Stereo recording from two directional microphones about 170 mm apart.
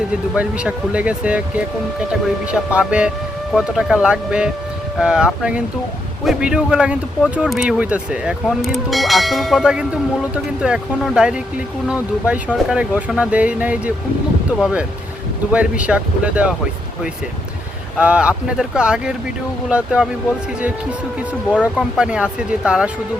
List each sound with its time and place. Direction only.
0.3 s speech: 5° right (ahead or behind)
17.9 s speech: 5° right (ahead or behind)
21.5 s speech: 5° right (ahead or behind)